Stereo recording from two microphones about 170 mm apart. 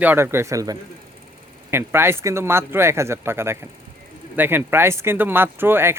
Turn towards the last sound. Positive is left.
turn(degrees=-15)  # may be behind; listen again after turning